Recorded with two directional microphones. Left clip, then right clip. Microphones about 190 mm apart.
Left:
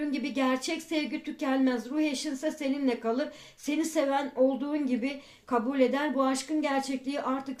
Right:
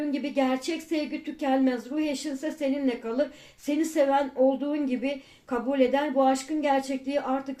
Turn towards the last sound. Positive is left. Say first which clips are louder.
# right 3 dB
turn(degrees=35)  # may be behind; listen again after turning